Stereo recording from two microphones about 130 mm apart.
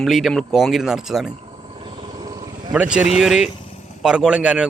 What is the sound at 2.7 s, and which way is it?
Speech, 10° right (ahead or behind).